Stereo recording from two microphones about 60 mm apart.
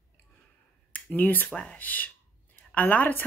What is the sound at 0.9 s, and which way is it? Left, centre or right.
A woman's voice, left.